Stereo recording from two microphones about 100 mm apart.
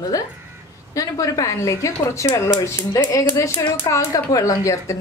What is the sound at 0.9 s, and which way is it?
A woman's voice, 35° left (ahead or behind).